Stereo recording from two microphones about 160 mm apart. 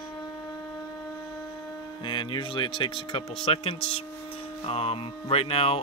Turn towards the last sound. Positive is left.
turn(degrees=35)  # may be behind; listen again after turning